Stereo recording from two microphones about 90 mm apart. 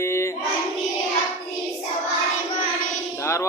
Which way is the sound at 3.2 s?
30° left (ahead or behind).